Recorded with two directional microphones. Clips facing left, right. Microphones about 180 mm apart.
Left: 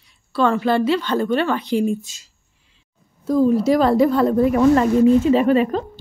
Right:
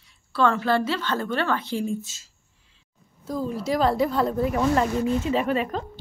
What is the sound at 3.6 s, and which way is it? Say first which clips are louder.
Speech: left 7 dB; 60° left (ahead or behind).